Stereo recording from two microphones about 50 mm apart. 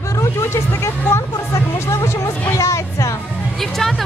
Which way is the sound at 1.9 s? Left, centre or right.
Left.